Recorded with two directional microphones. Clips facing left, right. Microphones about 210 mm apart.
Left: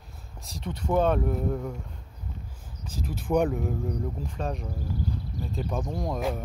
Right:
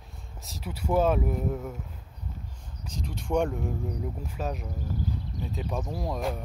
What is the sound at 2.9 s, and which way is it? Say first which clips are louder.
Speech: left 3 dB; 5° left (ahead or behind).